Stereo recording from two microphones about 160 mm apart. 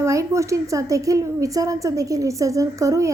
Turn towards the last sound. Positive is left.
turn(degrees=-20)  # may be behind; listen again after turning